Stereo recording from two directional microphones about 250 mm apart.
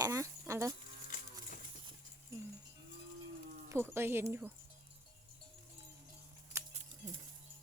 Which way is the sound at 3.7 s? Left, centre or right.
Centre.